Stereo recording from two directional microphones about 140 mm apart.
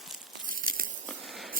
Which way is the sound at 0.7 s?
90° right.